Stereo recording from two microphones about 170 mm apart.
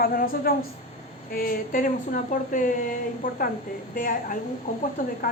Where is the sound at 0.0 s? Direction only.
60° left (ahead or behind).